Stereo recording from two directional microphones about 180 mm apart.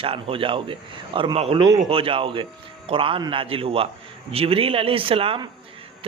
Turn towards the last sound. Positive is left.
turn(degrees=-30)  # may be behind; listen again after turning